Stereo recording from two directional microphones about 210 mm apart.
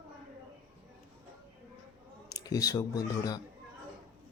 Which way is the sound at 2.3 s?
15° left (ahead or behind).